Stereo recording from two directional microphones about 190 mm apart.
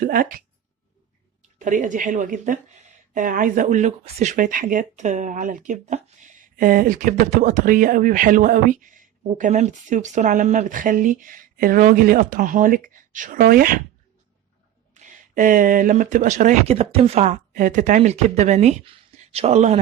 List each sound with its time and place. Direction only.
0.0 s speech: 50° right (ahead or behind)
1.5 s speech: 40° right (ahead or behind)
14.9 s speech: 45° right (ahead or behind)